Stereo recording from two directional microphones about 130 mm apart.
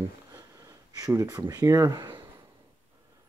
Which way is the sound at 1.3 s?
30° right (ahead or behind).